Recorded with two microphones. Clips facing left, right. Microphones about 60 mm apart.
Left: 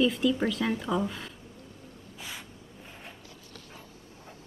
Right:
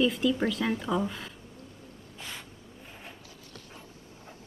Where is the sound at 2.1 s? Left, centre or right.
Centre.